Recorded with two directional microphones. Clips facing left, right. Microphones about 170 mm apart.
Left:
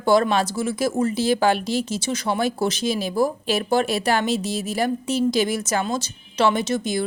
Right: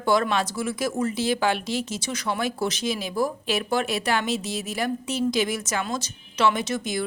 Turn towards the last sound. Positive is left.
turn(degrees=30)  # may be behind; listen again after turning